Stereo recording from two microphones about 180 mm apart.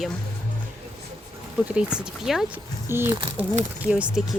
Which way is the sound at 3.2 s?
30° right (ahead or behind).